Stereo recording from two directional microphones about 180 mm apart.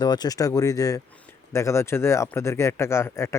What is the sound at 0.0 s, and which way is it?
Speech, 25° left (ahead or behind).